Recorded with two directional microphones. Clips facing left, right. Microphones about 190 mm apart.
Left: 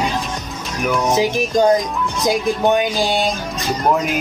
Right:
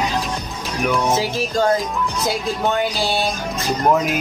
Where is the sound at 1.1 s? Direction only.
15° left (ahead or behind).